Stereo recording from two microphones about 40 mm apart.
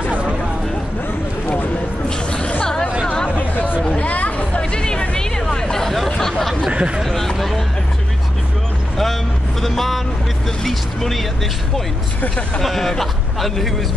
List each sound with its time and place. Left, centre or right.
2.0 s music: left
3.3 s chatter: left
4.6 s music: centre
5.1 s hubbub: centre
6.0 s a sound: centre
6.7 s a sound: right
7.0 s speech: centre
8.9 s vehicle: centre
10.6 s speech: centre
12.6 s a man's voice: centre